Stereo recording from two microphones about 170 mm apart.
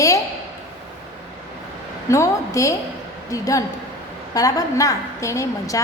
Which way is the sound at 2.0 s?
15° left (ahead or behind).